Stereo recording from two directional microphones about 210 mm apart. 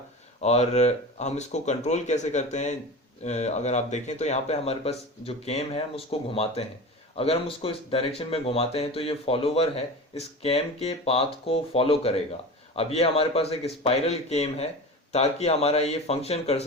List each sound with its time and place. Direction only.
0.4 s speech: 30° left (ahead or behind)